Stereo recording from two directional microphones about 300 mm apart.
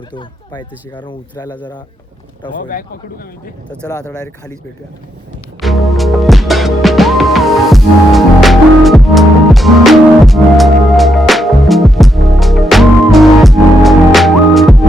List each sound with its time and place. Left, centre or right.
0.1 s speech: centre
2.6 s a man's voice: left
3.7 s speech: centre
5.5 s music: centre